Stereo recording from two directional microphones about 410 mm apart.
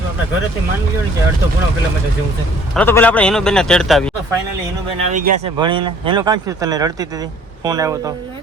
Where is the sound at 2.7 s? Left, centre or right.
Centre.